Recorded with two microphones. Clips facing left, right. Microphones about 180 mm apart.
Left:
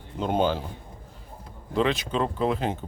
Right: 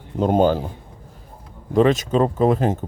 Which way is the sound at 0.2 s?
45° right (ahead or behind).